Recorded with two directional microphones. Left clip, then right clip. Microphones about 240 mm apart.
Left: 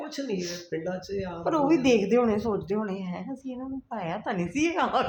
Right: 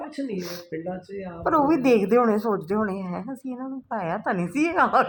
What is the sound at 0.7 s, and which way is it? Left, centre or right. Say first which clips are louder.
Speech: left 1 dB; centre.